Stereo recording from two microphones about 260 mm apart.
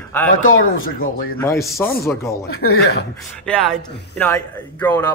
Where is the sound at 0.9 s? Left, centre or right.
Left.